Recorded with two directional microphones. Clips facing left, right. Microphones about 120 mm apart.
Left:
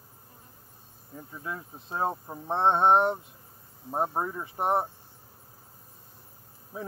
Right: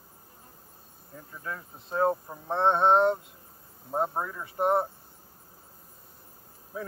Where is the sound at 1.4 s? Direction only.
20° left (ahead or behind).